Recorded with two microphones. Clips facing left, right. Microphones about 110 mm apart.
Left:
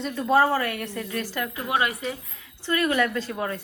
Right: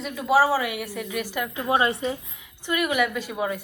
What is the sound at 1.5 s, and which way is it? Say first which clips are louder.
Speech: right 4 dB; 25° right (ahead or behind).